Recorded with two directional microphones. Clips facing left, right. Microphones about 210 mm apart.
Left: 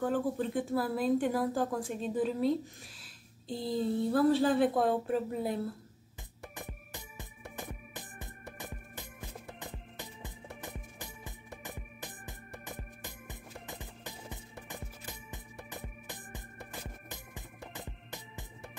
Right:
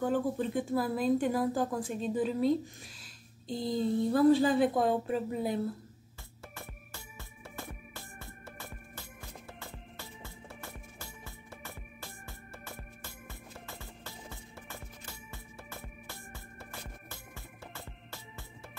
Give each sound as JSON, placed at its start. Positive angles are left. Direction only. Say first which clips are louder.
{"t": 0.0, "sound": "speech", "louder": "right 1 dB", "side_deg": 0}
{"t": 6.5, "sound": "music", "louder": "left 3 dB", "side_deg": 15}
{"t": 17.1, "sound": "organ", "louder": "left 2 dB", "side_deg": 15}